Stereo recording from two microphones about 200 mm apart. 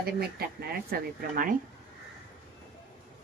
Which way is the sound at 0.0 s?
50° right (ahead or behind).